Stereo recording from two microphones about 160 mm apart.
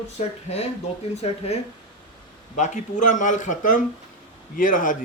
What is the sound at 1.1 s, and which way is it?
Speech, 40° left (ahead or behind).